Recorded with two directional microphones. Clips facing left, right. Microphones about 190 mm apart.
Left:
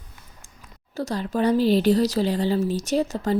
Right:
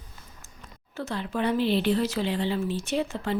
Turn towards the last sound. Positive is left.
turn(degrees=40)  # may be behind; listen again after turning